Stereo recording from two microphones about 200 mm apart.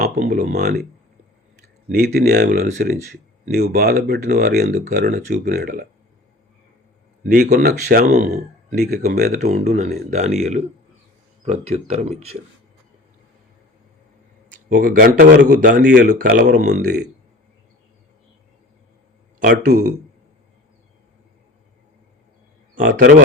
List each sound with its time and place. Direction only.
0.2 s speech: 35° right (ahead or behind)
0.5 s speech: 55° right (ahead or behind)
1.9 s speech: 50° right (ahead or behind)
2.6 s speech: 40° right (ahead or behind)
7.3 s speech: 45° right (ahead or behind)
9.0 s speech: 50° right (ahead or behind)
9.4 s speech: 35° right (ahead or behind)
14.7 s speech: 45° right (ahead or behind)
19.4 s speech: 45° right (ahead or behind)
22.7 s a man's voice: 45° right (ahead or behind)